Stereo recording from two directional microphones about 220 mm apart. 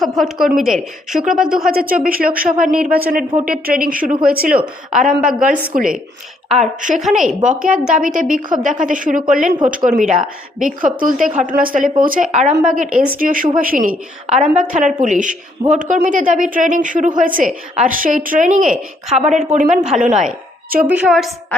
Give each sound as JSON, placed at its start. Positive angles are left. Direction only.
{"t": 0.0, "sound": "a woman's voice", "side_deg": 0}
{"t": 1.7, "sound": "speech", "side_deg": -40}
{"t": 2.7, "sound": "a woman's voice", "side_deg": -5}
{"t": 3.0, "sound": "speech", "side_deg": -40}
{"t": 4.5, "sound": "a woman's voice", "side_deg": -5}
{"t": 5.1, "sound": "speech", "side_deg": -40}
{"t": 20.8, "sound": "a woman's voice", "side_deg": -5}